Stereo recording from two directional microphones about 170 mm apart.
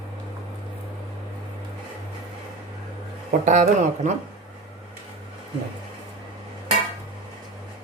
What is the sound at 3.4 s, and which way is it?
Speech, 45° right (ahead or behind).